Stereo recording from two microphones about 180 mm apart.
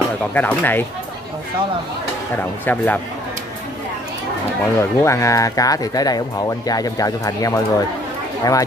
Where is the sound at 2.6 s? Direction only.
10° left (ahead or behind).